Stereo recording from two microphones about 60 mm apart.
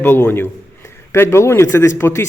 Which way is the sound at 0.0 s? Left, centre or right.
Left.